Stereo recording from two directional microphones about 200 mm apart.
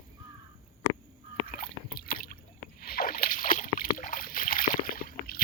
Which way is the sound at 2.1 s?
45° left (ahead or behind).